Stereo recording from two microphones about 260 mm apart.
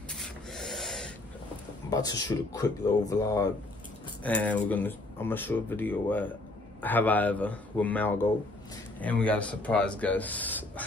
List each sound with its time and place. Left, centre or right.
0.1 s rub: centre
1.9 s speech: centre